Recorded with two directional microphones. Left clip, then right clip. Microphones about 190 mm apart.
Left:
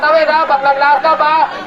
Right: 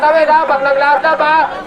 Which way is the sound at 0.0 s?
40° right (ahead or behind).